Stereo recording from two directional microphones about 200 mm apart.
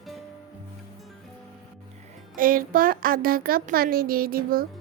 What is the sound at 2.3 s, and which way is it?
Speech, 45° right (ahead or behind).